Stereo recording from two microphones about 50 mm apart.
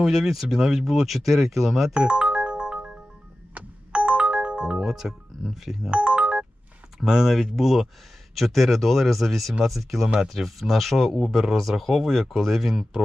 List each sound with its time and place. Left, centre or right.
0.0 s speech: centre
1.9 s music: centre
5.9 s ringtone: centre
7.0 s speech: centre